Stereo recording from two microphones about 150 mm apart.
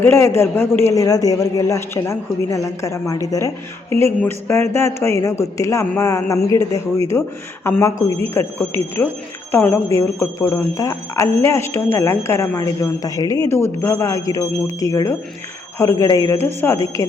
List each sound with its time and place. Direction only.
0.0 s speech: 15° left (ahead or behind)